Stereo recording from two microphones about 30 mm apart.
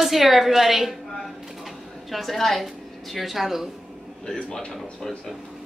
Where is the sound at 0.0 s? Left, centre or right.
Centre.